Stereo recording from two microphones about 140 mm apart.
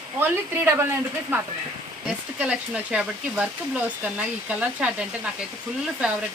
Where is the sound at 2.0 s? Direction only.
10° right (ahead or behind).